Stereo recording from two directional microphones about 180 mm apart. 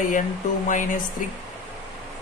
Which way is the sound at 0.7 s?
45° left (ahead or behind).